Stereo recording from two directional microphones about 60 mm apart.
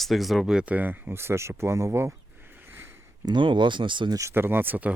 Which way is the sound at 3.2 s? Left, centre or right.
Right.